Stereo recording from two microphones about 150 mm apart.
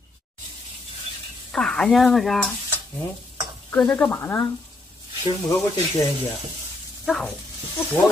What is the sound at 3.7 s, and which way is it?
Speech, 10° left (ahead or behind).